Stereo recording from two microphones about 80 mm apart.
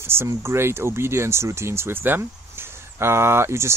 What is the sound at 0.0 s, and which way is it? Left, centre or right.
Speech, right.